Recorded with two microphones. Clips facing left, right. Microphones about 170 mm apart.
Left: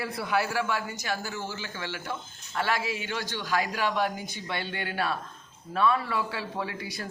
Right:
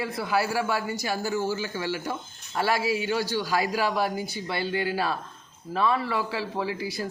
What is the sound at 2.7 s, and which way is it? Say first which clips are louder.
Speech: right 6 dB; 35° right (ahead or behind).